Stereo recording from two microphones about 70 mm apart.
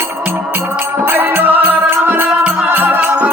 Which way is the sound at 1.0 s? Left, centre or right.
Right.